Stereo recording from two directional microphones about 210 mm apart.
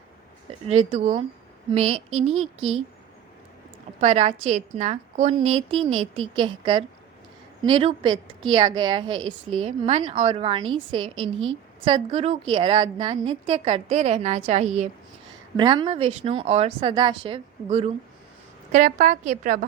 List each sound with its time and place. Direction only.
0.7 s a woman's voice: 30° right (ahead or behind)
2.3 s speech: 85° right
4.0 s a woman's voice: 30° right (ahead or behind)
15.5 s a woman's voice: 20° right (ahead or behind)
18.7 s a woman's voice: 40° right (ahead or behind)